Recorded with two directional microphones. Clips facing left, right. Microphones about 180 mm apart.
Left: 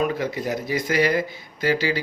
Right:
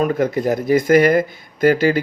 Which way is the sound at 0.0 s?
50° right (ahead or behind).